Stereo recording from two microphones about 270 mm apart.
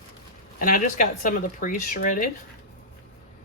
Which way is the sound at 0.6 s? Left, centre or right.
Left.